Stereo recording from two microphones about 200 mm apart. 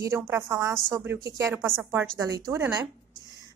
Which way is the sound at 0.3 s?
15° right (ahead or behind).